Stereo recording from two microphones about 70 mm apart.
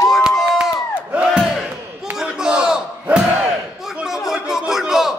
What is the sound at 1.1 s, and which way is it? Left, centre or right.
Battle cry, centre.